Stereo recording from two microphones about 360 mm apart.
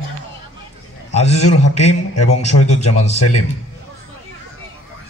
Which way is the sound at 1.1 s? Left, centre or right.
Centre.